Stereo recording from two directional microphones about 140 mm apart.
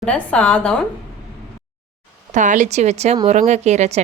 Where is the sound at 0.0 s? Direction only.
5° left (ahead or behind).